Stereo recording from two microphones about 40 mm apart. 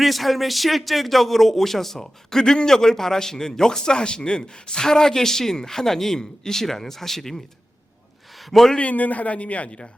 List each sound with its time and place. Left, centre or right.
0.0 s speech: centre
8.4 s speech: centre
8.8 s speech: left